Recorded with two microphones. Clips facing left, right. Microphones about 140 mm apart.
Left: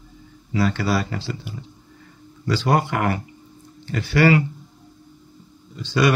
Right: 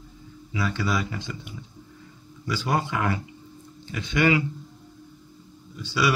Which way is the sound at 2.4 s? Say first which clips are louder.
Left 6 dB; 90° left.